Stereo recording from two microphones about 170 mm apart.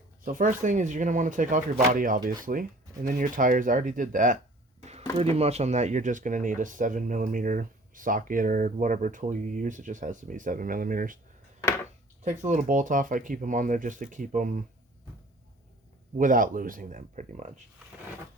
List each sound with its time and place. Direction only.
0.3 s speech: 50° right (ahead or behind)
4.8 s a sound: 40° right (ahead or behind)
5.1 s speech: 35° right (ahead or behind); by 11.2 s 55° right (ahead or behind)
12.2 s speech: 45° right (ahead or behind)
16.1 s speech: 50° right (ahead or behind)